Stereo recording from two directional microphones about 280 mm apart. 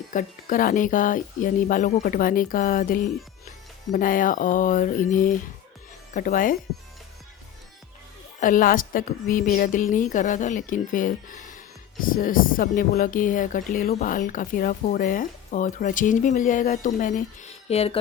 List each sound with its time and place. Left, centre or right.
0.1 s a woman's voice: left
8.4 s a woman's voice: left